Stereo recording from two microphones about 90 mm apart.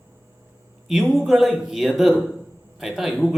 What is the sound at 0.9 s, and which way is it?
Speech, centre (ahead or behind).